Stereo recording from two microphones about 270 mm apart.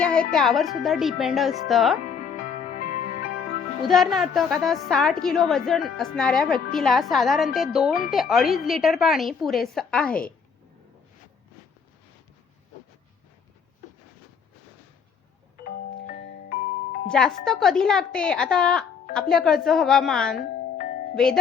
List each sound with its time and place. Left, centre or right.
0.0 s a woman's voice: centre
2.0 s music: left
3.8 s a woman's voice: centre
15.6 s glockenspiel: left
17.1 s a woman's voice: centre
20.4 s music: left